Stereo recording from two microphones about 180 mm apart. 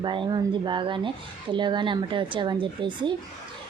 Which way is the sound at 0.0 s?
25° right (ahead or behind).